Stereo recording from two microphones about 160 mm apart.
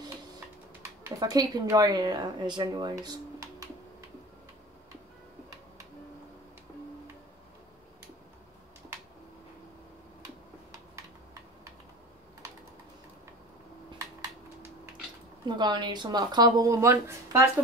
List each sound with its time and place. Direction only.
1.0 s a woman's voice: 25° right (ahead or behind)
15.4 s a woman's voice: 30° right (ahead or behind)